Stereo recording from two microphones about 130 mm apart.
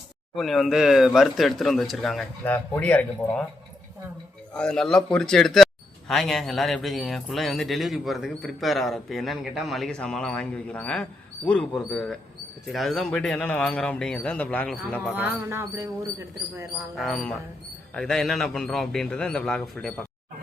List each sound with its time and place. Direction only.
0.3 s speech: centre (ahead or behind)
2.4 s speech: 15° left (ahead or behind)
4.5 s speech: 5° left (ahead or behind)
15.1 s speech: 15° right (ahead or behind)
16.7 s speech: centre (ahead or behind)